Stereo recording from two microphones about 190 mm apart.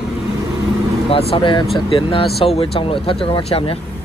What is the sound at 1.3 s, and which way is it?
Speech, 25° left (ahead or behind).